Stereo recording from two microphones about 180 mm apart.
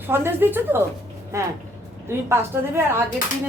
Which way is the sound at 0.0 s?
10° right (ahead or behind).